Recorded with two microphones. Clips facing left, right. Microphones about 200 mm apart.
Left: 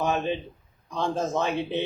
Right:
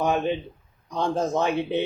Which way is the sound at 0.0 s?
15° right (ahead or behind).